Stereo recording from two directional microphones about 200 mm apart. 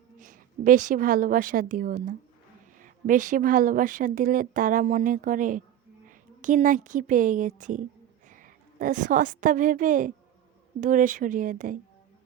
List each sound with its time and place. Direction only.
0.2 s a woman's voice: 40° right (ahead or behind)